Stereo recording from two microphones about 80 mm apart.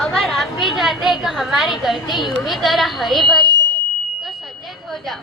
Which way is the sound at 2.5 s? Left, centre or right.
Centre.